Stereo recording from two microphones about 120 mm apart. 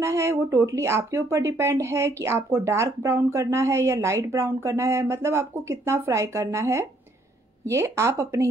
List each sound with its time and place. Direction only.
0.0 s speech: 25° right (ahead or behind)